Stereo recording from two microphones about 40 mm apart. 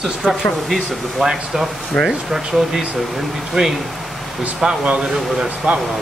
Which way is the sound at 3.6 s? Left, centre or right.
Right.